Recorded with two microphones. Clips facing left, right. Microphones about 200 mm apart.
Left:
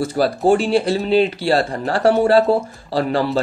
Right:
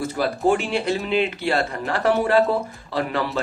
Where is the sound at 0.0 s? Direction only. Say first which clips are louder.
Left 4 dB; 30° left (ahead or behind).